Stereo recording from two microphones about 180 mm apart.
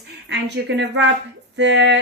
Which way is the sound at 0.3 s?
70° right (ahead or behind).